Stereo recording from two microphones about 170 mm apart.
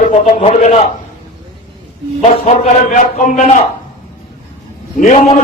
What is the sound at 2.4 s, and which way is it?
A man's voice, 45° left (ahead or behind).